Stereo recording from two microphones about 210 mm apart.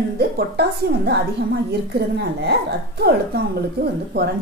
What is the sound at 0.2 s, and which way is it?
A woman's voice, 50° right (ahead or behind).